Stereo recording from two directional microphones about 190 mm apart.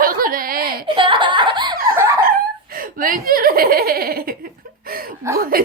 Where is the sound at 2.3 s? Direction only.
50° right (ahead or behind).